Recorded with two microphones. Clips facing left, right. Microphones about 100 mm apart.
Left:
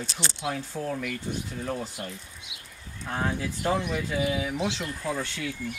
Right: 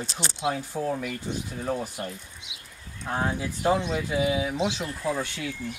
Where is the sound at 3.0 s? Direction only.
20° right (ahead or behind).